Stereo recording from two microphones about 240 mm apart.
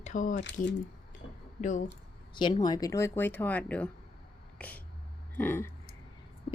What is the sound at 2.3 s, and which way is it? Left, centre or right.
Speech, centre.